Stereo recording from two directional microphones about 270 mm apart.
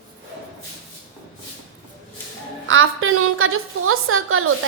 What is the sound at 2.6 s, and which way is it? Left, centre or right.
A woman's voice, right.